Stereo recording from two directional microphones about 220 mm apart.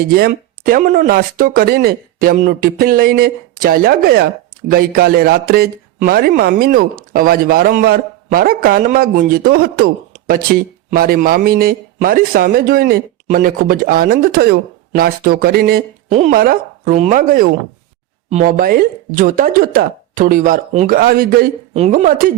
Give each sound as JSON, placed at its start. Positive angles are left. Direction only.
{"t": 0.2, "sound": "speech", "side_deg": -40}
{"t": 16.1, "sound": "speech", "side_deg": -30}
{"t": 21.7, "sound": "speech", "side_deg": -30}